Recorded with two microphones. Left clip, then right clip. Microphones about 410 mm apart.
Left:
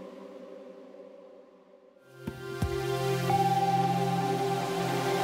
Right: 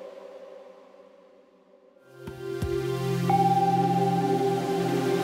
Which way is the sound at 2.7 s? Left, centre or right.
Left.